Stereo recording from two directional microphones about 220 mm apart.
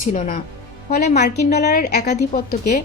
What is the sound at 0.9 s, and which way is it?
A woman's voice, 45° left (ahead or behind).